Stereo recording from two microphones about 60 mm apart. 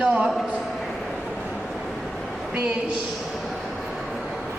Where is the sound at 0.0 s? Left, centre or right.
Centre.